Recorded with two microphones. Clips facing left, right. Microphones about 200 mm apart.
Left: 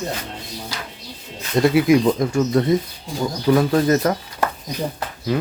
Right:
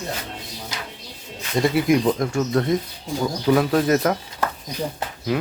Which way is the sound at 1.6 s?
Centre (ahead or behind).